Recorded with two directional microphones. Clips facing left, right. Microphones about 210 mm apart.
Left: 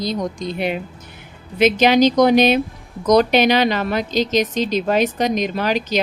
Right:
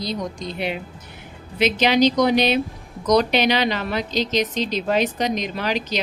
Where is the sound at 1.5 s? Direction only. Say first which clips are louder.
Left 4 dB; 50° left (ahead or behind).